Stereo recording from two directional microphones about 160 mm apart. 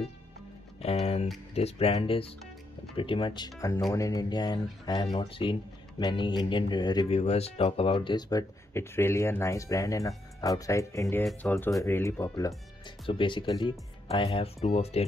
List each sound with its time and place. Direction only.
0.7 s speech: 40° left (ahead or behind)
7.1 s speech: 40° left (ahead or behind); by 12.9 s 20° left (ahead or behind)
13.0 s speech: 30° left (ahead or behind)